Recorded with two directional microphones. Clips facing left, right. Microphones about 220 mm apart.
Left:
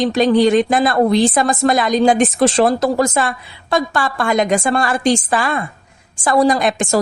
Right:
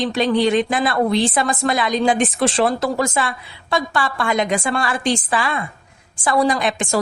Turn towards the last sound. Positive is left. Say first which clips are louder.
# left 4 dB
turn(degrees=45)  # may be behind; listen again after turning